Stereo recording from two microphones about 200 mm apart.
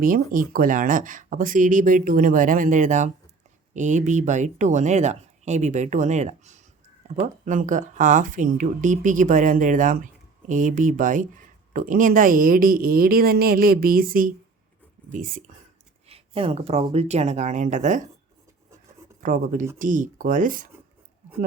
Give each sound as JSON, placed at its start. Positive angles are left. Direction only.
{"t": 0.0, "sound": "speech", "side_deg": -45}
{"t": 16.0, "sound": "speech", "side_deg": -30}
{"t": 19.2, "sound": "speech", "side_deg": -40}